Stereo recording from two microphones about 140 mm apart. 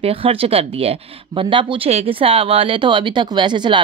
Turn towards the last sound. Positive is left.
turn(degrees=-35)  # may be behind; listen again after turning